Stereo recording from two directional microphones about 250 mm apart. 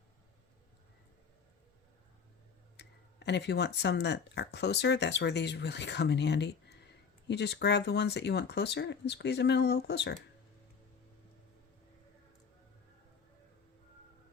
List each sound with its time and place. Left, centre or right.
2.7 s speech: left